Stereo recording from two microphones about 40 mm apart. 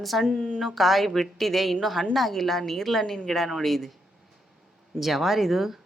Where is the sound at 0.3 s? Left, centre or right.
Left.